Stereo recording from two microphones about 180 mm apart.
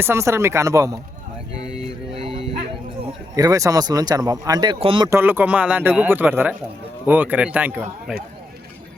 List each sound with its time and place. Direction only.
0.0 s a man's voice: 15° right (ahead or behind)
1.5 s mantra: 35° right (ahead or behind)
2.1 s a sound: 30° right (ahead or behind)
3.3 s speech: 20° right (ahead or behind)
5.0 s a man's voice: 15° right (ahead or behind)